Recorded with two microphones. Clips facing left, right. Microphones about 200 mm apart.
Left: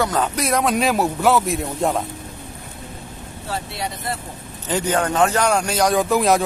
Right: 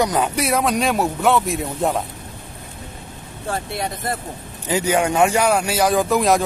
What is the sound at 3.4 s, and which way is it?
Speech, 50° right (ahead or behind).